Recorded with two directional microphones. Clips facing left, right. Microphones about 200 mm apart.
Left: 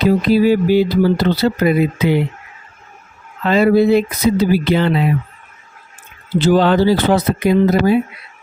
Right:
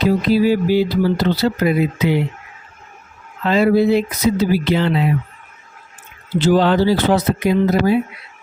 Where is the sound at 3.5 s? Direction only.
55° left (ahead or behind).